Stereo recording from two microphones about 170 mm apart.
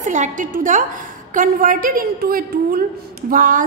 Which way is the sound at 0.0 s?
45° right (ahead or behind).